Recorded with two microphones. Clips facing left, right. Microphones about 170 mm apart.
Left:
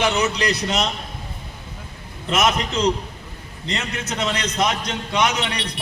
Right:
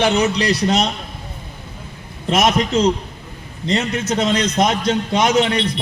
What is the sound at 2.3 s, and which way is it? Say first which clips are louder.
A man's voice: right 4 dB; 30° right (ahead or behind).